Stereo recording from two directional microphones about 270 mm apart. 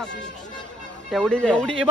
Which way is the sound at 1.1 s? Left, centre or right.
Centre.